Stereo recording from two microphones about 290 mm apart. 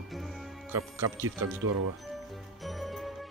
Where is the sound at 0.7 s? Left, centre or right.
Centre.